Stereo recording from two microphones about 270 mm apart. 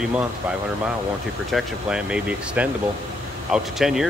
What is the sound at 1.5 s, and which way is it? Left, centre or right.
Speech, centre.